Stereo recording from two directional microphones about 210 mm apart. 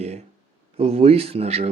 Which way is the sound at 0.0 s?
30° right (ahead or behind).